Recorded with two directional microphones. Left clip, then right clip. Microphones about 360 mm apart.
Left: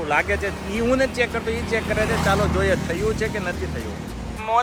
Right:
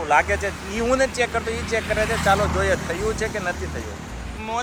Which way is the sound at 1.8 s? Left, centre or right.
Left.